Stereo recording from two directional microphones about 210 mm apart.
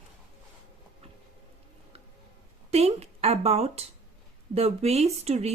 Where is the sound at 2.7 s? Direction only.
30° right (ahead or behind).